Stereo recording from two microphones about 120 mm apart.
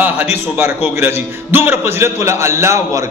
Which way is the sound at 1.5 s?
20° right (ahead or behind).